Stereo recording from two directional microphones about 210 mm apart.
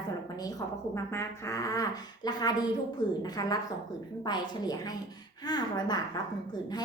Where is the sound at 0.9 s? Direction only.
15° left (ahead or behind).